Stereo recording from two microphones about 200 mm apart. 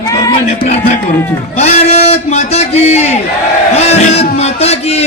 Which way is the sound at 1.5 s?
35° left (ahead or behind).